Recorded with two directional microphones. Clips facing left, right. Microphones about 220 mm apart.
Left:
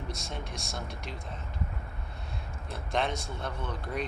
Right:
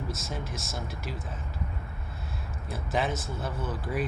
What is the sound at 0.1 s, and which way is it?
Speech, centre (ahead or behind).